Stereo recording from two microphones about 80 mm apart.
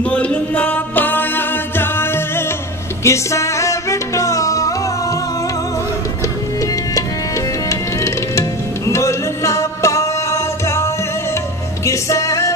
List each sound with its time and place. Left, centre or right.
0.0 s music: centre; by 4.7 s left
8.0 s music: left